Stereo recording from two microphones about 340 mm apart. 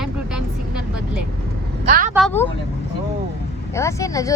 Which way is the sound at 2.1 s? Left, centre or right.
Centre.